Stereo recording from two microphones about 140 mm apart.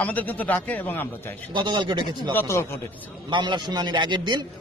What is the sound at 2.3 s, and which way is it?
Speech, 15° left (ahead or behind).